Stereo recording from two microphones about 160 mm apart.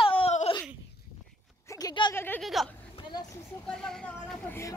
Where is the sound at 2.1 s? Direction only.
10° left (ahead or behind).